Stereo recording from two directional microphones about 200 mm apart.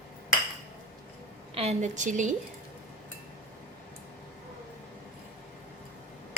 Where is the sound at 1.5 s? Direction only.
30° right (ahead or behind).